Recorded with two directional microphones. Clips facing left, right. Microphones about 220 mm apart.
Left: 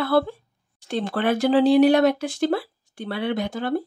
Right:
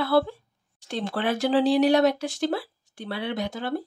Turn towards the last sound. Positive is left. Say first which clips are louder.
# left 4 dB
turn(degrees=50)  # may be behind; listen again after turning